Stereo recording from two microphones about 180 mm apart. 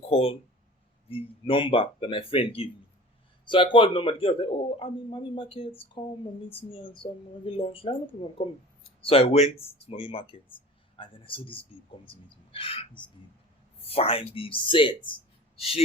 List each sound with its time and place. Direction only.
0.0 s a man's voice: 35° left (ahead or behind)